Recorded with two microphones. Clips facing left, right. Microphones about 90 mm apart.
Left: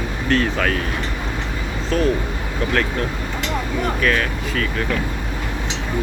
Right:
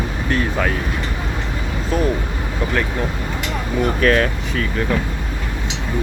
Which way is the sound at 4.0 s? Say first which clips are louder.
Right 5 dB; 35° right (ahead or behind).